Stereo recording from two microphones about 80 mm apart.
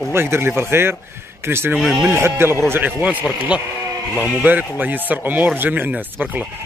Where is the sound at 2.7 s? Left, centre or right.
Right.